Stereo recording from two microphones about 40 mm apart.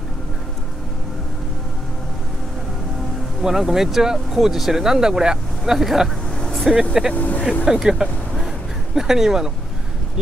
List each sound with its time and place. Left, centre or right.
3.4 s speech: centre
5.8 s speech: centre
6.2 s vehicle: left
6.6 s speech: centre
7.2 s speech: left
7.6 s speech: centre